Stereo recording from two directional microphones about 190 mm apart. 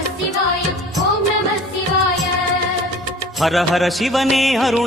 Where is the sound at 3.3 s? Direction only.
Centre (ahead or behind).